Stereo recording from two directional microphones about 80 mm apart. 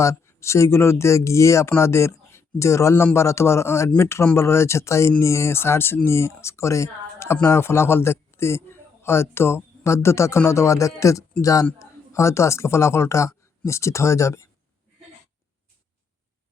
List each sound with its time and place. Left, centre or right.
0.0 s a man's voice: left